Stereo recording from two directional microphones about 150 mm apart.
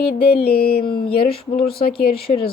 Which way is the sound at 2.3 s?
40° left (ahead or behind).